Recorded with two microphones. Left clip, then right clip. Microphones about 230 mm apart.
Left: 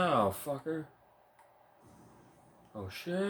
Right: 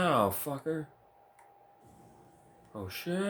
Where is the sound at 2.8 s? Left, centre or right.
Right.